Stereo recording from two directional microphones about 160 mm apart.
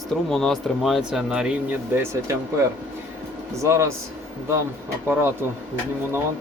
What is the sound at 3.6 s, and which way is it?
Speech, 15° right (ahead or behind).